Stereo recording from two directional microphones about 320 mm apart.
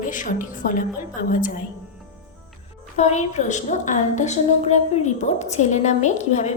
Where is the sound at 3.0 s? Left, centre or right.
Left.